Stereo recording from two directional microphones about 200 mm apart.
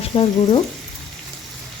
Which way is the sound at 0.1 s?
25° left (ahead or behind).